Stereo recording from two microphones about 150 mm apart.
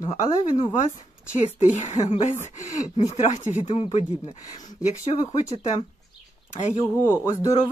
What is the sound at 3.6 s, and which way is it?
Speech, 40° left (ahead or behind).